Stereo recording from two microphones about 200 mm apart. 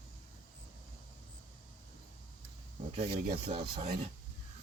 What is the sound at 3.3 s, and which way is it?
Speech, 25° right (ahead or behind).